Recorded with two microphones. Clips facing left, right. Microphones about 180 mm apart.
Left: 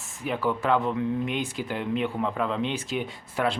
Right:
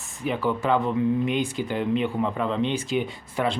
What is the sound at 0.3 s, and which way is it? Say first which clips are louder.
Speech: right 1 dB; centre (ahead or behind).